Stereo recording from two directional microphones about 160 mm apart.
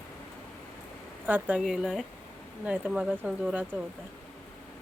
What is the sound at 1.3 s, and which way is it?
A woman's voice, 5° right (ahead or behind).